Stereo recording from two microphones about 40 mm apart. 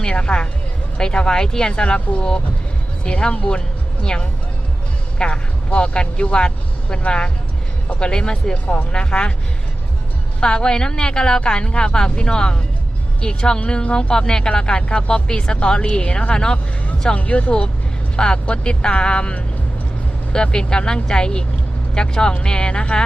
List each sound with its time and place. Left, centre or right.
0.0 s speech: left
3.0 s speech: left
8.5 s speech: left
10.4 s speech: left
17.2 s speech: left
18.2 s speech: left
20.3 s speech: left